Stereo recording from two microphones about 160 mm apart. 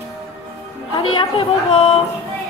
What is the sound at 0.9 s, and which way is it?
A woman's voice, 35° left (ahead or behind).